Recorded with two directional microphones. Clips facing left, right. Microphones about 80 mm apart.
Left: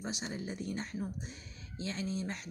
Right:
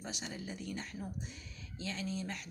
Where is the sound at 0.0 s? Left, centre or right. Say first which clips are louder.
Left 4 dB; left.